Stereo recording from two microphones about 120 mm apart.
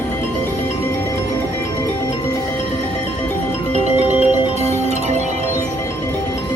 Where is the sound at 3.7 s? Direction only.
70° right (ahead or behind).